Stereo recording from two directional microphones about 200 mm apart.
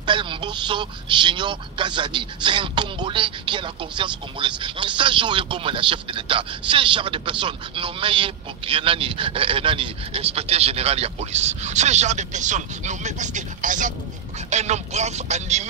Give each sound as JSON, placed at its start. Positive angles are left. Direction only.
{"t": 0.0, "sound": "speech", "side_deg": -25}